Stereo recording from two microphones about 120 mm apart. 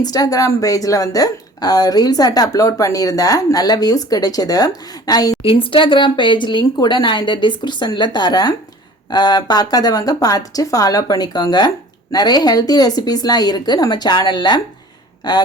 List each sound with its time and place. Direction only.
0.0 s a woman's voice: 30° left (ahead or behind)
5.4 s a woman's voice: 50° left (ahead or behind)